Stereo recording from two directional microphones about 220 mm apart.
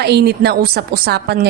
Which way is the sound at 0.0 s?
45° right (ahead or behind).